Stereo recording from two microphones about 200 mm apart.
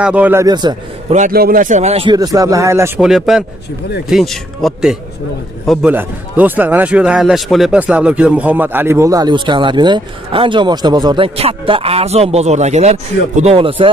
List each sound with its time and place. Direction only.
0.0 s a man's voice: 5° right (ahead or behind)
1.1 s a man's voice: 45° right (ahead or behind)
2.1 s a man's voice: 15° right (ahead or behind)
3.0 s a man's voice: centre (ahead or behind); by 13.8 s 25° right (ahead or behind)